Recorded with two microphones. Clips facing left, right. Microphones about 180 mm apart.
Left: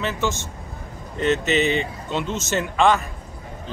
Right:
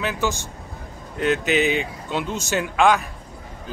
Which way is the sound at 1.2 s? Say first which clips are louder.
Even; 5° right (ahead or behind).